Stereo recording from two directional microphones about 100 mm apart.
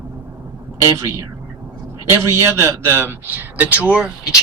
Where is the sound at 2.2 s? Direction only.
30° right (ahead or behind).